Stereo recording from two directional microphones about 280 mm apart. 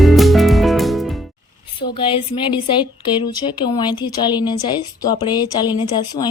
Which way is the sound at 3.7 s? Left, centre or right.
Centre.